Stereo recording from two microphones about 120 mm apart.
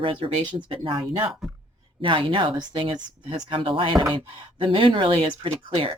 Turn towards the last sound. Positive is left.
turn(degrees=-50)  # may be behind; listen again after turning